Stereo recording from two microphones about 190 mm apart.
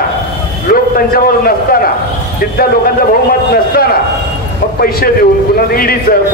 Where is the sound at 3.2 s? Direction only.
50° left (ahead or behind).